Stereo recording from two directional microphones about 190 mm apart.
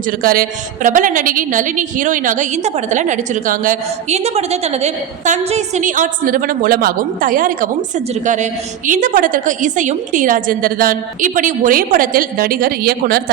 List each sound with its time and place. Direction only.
0.2 s a woman's voice: 50° right (ahead or behind)